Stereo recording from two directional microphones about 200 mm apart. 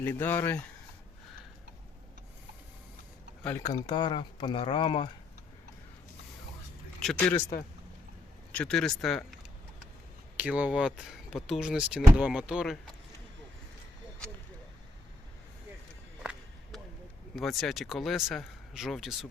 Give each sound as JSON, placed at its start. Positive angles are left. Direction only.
{"t": 0.0, "sound": "speech", "side_deg": 10}
{"t": 3.4, "sound": "speech", "side_deg": 15}
{"t": 7.0, "sound": "speech", "side_deg": 0}
{"t": 8.5, "sound": "speech", "side_deg": 5}
{"t": 17.3, "sound": "speech", "side_deg": 0}